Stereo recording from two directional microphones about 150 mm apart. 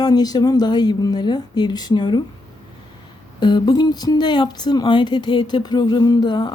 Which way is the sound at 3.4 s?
30° left (ahead or behind).